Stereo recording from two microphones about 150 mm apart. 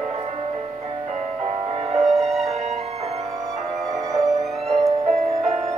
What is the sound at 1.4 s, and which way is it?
Music, 45° right (ahead or behind).